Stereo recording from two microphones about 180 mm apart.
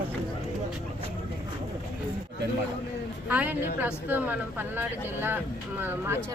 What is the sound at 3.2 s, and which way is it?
Speech, 10° right (ahead or behind).